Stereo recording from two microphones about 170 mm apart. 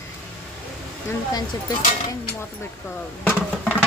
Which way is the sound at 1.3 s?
20° left (ahead or behind).